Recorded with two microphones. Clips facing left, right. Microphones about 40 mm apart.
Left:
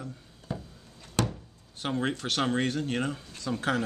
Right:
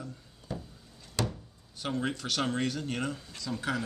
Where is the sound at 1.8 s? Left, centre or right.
Left.